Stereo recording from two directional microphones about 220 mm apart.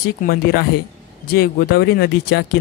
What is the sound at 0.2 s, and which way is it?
Speech, 45° left (ahead or behind).